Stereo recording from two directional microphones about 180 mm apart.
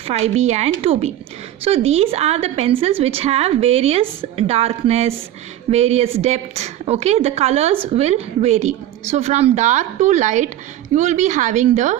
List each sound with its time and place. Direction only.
0.1 s a woman's voice: 35° right (ahead or behind)